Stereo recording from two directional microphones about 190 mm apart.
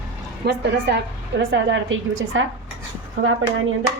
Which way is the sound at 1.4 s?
80° right.